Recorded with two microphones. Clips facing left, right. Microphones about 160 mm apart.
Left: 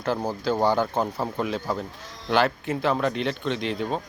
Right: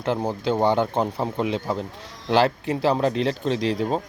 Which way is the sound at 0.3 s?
25° right (ahead or behind).